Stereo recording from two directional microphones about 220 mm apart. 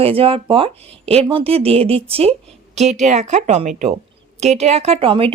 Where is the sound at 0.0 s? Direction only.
25° right (ahead or behind).